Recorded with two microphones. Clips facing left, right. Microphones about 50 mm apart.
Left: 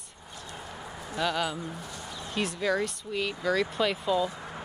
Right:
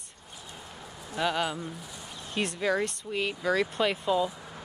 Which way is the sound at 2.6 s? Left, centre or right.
Centre.